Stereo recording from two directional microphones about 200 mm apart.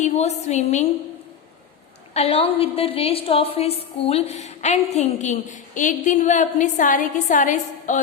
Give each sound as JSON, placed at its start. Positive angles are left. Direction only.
{"t": 0.0, "sound": "a woman's voice", "side_deg": 35}
{"t": 2.1, "sound": "a woman's voice", "side_deg": 30}